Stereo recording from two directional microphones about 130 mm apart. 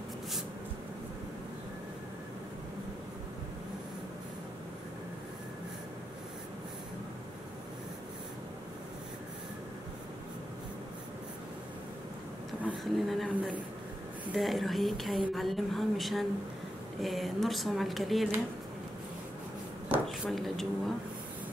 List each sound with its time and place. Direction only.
12.8 s speech: centre (ahead or behind)
14.3 s speech: centre (ahead or behind)
20.1 s speech: centre (ahead or behind)